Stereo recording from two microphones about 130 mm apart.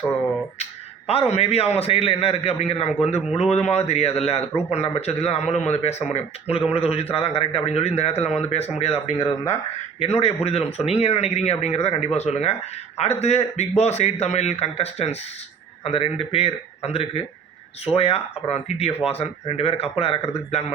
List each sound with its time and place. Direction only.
0.6 s a man's voice: 50° left (ahead or behind)
9.1 s speech: 25° left (ahead or behind)
10.0 s a man's voice: 50° left (ahead or behind)